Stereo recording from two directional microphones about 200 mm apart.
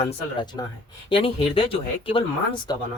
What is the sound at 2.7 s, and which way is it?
Speech, 20° left (ahead or behind).